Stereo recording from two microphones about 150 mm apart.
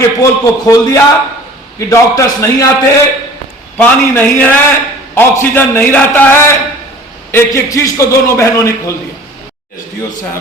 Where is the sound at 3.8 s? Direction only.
15° left (ahead or behind).